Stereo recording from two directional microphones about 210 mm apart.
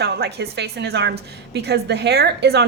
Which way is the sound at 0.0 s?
50° right (ahead or behind).